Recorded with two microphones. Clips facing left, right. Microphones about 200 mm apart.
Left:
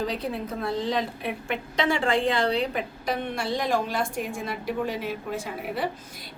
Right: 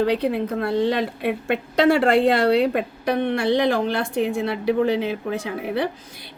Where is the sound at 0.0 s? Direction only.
70° right (ahead or behind).